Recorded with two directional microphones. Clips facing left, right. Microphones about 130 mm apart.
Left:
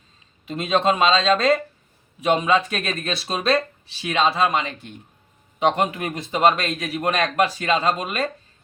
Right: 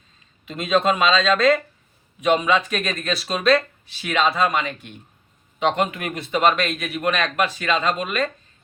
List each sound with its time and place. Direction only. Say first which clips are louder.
0.4 s speech: even; 30° left (ahead or behind)